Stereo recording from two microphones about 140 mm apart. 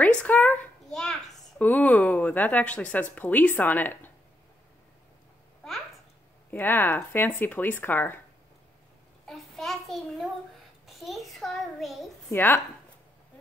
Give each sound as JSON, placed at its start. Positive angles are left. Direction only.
{"t": 0.0, "sound": "a child's voice", "side_deg": 10}
{"t": 6.5, "sound": "speech", "side_deg": 15}
{"t": 9.2, "sound": "a child's voice", "side_deg": 0}
{"t": 12.3, "sound": "speech", "side_deg": 15}